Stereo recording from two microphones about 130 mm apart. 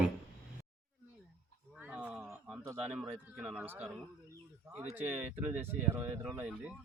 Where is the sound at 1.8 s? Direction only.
10° right (ahead or behind).